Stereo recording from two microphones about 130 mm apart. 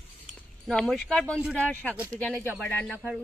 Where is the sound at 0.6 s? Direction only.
Centre (ahead or behind).